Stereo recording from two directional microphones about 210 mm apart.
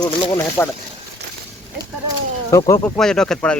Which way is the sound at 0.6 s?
10° left (ahead or behind).